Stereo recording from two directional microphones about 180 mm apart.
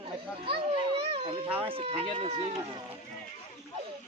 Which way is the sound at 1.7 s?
30° right (ahead or behind).